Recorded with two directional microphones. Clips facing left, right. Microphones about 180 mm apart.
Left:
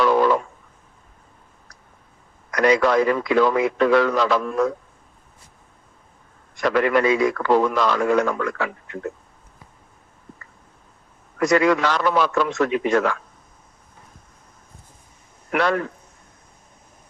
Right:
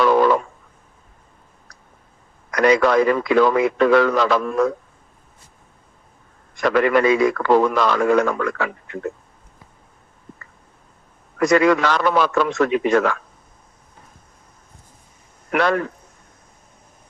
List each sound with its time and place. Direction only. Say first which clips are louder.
0.0 s a sound: right 2 dB; 60° right (ahead or behind)
2.6 s speech: right 2 dB; 60° right (ahead or behind)
6.6 s speech: right 2 dB; 65° right (ahead or behind)
11.3 s speech: right 2 dB; 65° right (ahead or behind)
15.5 s speech: right 2 dB; 65° right (ahead or behind)